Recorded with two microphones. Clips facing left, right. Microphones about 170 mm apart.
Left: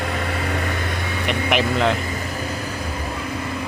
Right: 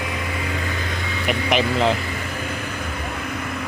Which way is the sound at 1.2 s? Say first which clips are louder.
Right 1 dB; centre (ahead or behind).